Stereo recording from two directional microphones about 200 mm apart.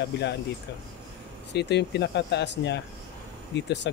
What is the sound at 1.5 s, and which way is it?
Speech, 60° left (ahead or behind).